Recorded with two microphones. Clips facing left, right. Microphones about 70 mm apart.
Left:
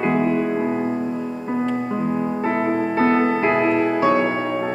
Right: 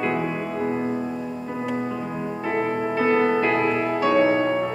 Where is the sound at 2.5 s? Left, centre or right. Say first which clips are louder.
Left 1 dB; left.